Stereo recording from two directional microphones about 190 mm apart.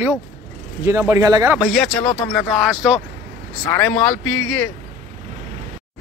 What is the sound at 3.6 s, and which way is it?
Speech, 10° left (ahead or behind).